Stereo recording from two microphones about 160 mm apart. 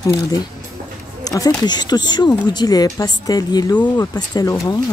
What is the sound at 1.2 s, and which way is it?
Speech, 25° left (ahead or behind).